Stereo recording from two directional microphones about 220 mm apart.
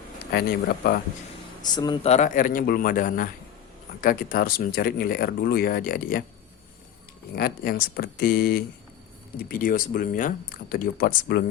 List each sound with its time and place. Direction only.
0.3 s speech: 45° left (ahead or behind)
1.7 s speech: 20° left (ahead or behind); by 6.2 s 40° left (ahead or behind)
7.3 s speech: 45° left (ahead or behind)